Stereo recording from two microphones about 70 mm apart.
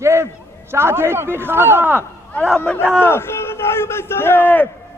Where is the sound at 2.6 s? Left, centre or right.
Left.